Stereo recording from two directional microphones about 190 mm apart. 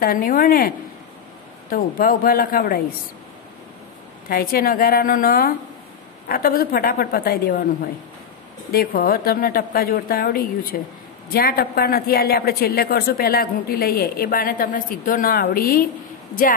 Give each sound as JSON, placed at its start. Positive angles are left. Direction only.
{"t": 0.0, "sound": "a woman's voice", "side_deg": 50}
{"t": 4.3, "sound": "a woman's voice", "side_deg": 50}